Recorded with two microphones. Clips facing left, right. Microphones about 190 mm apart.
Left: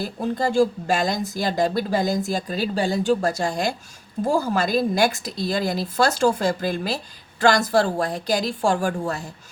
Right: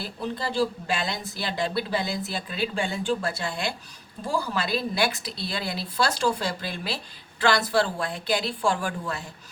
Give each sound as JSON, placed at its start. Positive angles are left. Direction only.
{"t": 0.0, "sound": "a woman's voice", "side_deg": 45}